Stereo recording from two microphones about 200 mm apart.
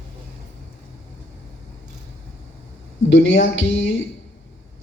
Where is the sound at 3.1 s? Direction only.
70° left (ahead or behind).